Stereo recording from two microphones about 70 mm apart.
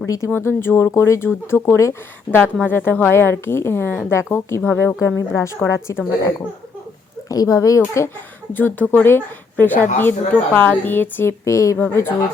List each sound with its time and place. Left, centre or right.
0.0 s speech: left
0.3 s speech: left
2.6 s speech: left
7.3 s speech: left
8.5 s speech: left
11.8 s speech: left